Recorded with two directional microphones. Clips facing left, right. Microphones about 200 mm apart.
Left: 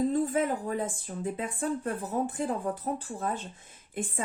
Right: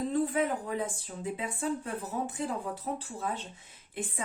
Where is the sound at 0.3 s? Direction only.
50° left (ahead or behind).